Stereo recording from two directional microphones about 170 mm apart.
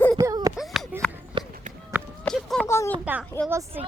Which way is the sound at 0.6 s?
Centre (ahead or behind).